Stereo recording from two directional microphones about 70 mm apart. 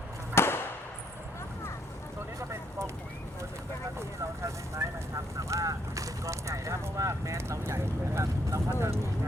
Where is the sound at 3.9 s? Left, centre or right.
Right.